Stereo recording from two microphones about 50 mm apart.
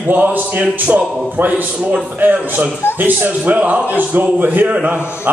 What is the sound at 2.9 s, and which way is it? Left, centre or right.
A man's voice, right.